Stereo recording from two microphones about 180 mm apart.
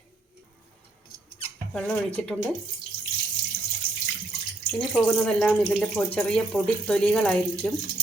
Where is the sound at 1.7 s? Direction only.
5° left (ahead or behind).